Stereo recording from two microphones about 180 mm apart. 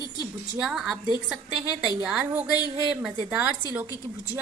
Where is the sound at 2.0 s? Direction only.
5° right (ahead or behind).